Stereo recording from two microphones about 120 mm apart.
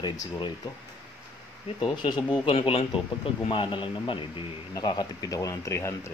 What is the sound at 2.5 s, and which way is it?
Speech, 50° left (ahead or behind).